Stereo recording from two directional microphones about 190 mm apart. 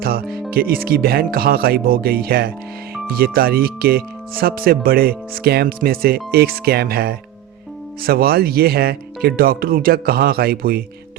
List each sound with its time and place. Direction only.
0.0 s speech: 50° right (ahead or behind)